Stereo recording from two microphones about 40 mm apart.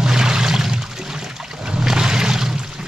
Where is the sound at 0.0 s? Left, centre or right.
Centre.